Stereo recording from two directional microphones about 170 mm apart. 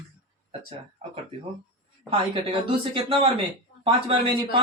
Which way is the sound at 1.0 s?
35° right (ahead or behind).